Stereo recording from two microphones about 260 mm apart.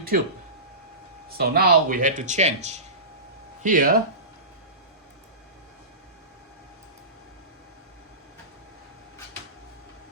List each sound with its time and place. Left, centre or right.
1.4 s speech: right